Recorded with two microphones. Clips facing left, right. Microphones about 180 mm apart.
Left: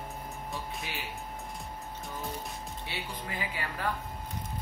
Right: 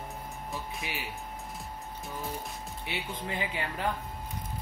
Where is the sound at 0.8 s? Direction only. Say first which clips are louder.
Right 2 dB; 15° right (ahead or behind).